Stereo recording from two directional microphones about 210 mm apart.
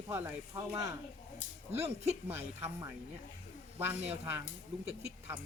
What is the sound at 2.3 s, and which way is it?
Speech, 10° right (ahead or behind).